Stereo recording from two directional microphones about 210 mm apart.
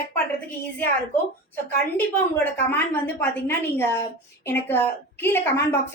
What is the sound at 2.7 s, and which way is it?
A woman's voice, 10° left (ahead or behind).